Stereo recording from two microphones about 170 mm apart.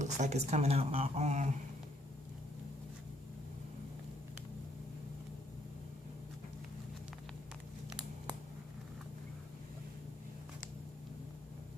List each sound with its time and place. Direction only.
0.0 s a woman's voice: 45° right (ahead or behind)